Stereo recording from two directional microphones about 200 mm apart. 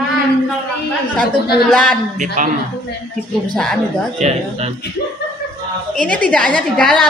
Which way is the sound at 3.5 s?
5° left (ahead or behind).